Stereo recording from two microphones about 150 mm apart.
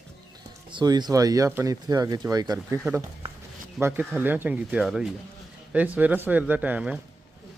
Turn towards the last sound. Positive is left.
turn(degrees=-10)  # may be behind; listen again after turning